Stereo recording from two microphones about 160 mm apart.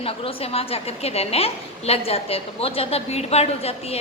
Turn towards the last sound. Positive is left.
turn(degrees=40)  # may be behind; listen again after turning